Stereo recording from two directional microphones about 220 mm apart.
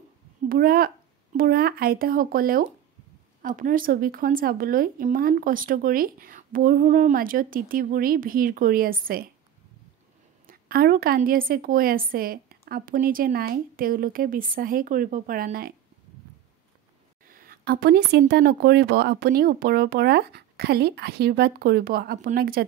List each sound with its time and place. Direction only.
0.5 s a woman's voice: 40° right (ahead or behind)
10.4 s a woman's voice: 40° right (ahead or behind)
17.3 s speech: 45° right (ahead or behind)